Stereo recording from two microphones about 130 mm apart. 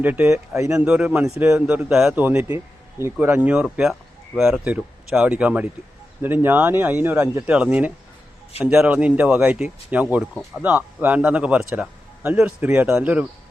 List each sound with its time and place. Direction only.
0.0 s speech: 15° right (ahead or behind)
0.9 s speech: 5° right (ahead or behind)
1.2 s speech: 20° right (ahead or behind)